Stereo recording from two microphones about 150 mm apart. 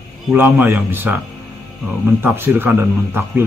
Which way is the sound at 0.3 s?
15° right (ahead or behind).